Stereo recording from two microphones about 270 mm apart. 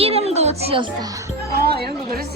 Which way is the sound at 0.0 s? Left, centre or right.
Right.